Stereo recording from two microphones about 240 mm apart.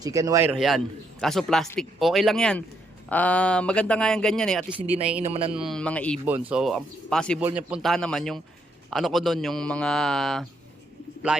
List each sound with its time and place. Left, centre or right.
0.0 s a man's voice: centre
5.2 s a man's voice: right
5.5 s speech: centre
6.2 s speech: centre